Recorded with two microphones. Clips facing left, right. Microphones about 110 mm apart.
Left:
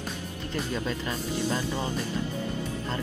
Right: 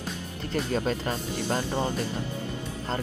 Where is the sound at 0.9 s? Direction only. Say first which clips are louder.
Right 1 dB; 50° right (ahead or behind).